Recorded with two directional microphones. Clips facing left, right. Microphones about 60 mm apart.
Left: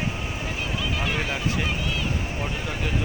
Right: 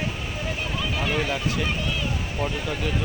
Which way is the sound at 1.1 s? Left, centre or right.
Centre.